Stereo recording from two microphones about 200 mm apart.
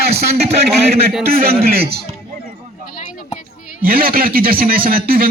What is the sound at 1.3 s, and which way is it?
Speech, 50° right (ahead or behind).